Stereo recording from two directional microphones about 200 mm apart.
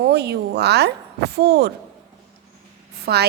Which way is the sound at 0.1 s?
55° right (ahead or behind).